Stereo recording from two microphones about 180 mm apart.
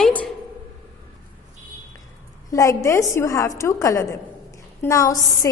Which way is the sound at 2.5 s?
20° left (ahead or behind).